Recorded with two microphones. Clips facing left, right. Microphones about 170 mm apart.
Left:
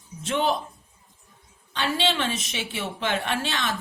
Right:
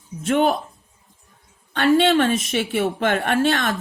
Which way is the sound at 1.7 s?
50° right (ahead or behind).